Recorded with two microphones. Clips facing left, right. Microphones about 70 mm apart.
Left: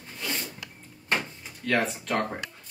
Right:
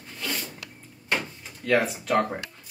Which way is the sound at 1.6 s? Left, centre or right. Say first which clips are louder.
Right 3 dB; centre.